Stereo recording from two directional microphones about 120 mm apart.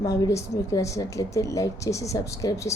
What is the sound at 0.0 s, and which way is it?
A woman's voice, 25° left (ahead or behind).